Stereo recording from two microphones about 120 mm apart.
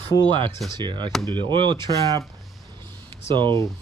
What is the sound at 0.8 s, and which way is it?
Speech, 40° right (ahead or behind).